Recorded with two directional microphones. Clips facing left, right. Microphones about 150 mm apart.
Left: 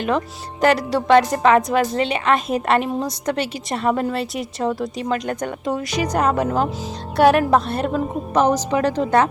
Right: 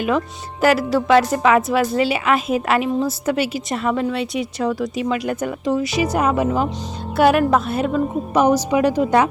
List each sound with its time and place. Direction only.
0.6 s a woman's voice: 5° right (ahead or behind)
3.8 s speech: 40° left (ahead or behind)
4.2 s a woman's voice: centre (ahead or behind)